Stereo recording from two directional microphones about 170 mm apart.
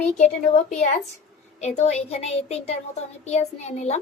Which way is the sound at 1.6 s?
40° left (ahead or behind).